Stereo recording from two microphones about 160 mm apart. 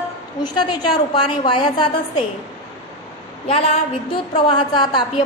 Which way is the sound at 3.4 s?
35° left (ahead or behind).